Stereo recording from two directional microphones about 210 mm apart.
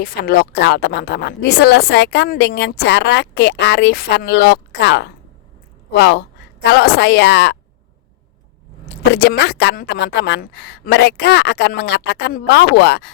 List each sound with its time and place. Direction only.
0.0 s a woman's voice: 45° left (ahead or behind)
9.1 s speech: 50° left (ahead or behind)